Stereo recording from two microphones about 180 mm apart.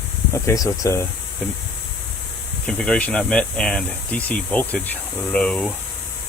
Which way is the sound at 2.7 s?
5° left (ahead or behind).